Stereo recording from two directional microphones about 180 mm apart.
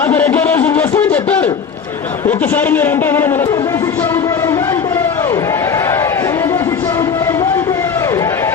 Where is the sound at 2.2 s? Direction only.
10° left (ahead or behind).